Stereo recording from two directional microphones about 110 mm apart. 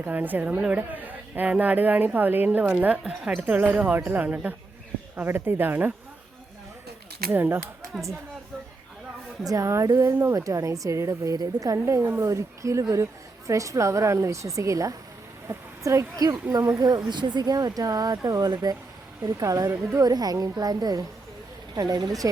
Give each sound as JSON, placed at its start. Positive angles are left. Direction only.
{"t": 0.0, "sound": "a woman's voice", "side_deg": -15}
{"t": 7.3, "sound": "a woman's voice", "side_deg": -20}
{"t": 7.9, "sound": "speech", "side_deg": 0}
{"t": 9.4, "sound": "a woman's voice", "side_deg": -30}